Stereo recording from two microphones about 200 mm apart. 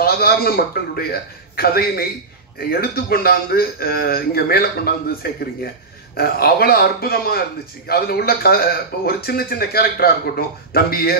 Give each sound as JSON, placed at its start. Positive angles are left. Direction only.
{"t": 0.0, "sound": "speech", "side_deg": 50}